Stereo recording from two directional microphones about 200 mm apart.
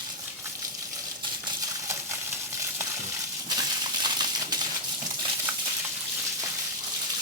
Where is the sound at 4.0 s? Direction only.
20° right (ahead or behind).